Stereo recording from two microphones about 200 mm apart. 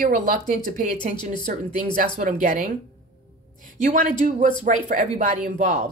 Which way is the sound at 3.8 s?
40° right (ahead or behind).